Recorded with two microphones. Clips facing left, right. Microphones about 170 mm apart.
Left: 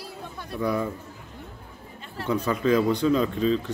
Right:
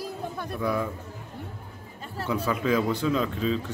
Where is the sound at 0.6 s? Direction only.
Centre (ahead or behind).